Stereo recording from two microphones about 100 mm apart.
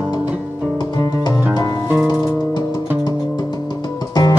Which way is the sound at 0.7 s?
45° left (ahead or behind).